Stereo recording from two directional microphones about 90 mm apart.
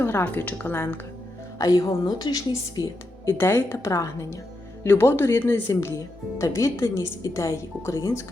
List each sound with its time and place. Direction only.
0.0 s speech: 25° left (ahead or behind)
1.5 s a woman's voice: 40° left (ahead or behind)
3.2 s a woman's voice: 30° left (ahead or behind)